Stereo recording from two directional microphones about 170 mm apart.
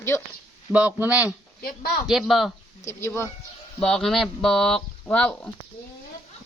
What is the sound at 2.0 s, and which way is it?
Speech, centre (ahead or behind).